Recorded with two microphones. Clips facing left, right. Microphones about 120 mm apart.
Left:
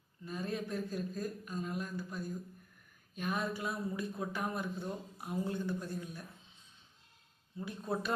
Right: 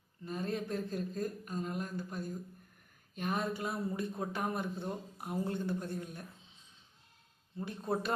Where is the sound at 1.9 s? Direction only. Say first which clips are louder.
Right 1 dB; 20° right (ahead or behind).